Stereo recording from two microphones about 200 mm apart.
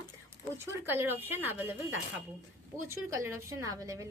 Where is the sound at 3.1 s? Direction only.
15° right (ahead or behind).